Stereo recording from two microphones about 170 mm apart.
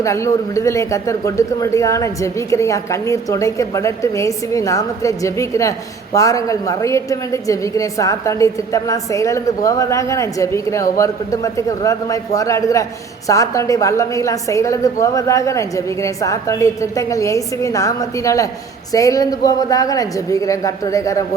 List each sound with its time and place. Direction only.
0.0 s a woman's voice: 15° left (ahead or behind)